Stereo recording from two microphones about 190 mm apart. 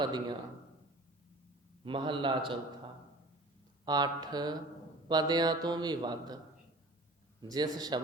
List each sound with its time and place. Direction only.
0.0 s a man's voice: 25° right (ahead or behind)
1.8 s a man's voice: 25° right (ahead or behind)
3.8 s a man's voice: 20° right (ahead or behind)
7.4 s a man's voice: 20° right (ahead or behind)